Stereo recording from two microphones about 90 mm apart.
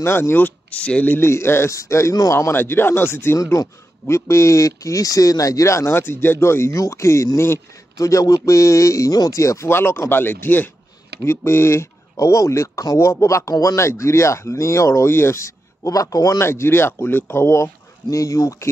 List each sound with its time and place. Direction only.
0.0 s speech: 25° left (ahead or behind); by 16.3 s 40° left (ahead or behind)
16.3 s speech: 30° left (ahead or behind)
18.1 s speech: 40° left (ahead or behind)